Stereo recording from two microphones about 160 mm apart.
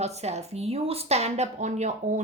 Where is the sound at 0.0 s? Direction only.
45° right (ahead or behind).